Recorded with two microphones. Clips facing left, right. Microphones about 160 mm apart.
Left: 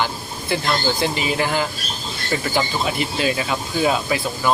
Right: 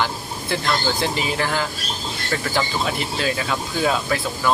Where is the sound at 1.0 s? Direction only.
10° left (ahead or behind).